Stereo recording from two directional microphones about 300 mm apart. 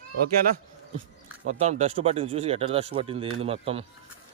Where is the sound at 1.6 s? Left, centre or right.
Right.